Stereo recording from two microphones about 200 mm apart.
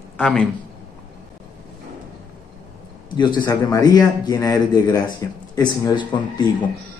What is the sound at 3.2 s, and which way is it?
Speech, 20° left (ahead or behind).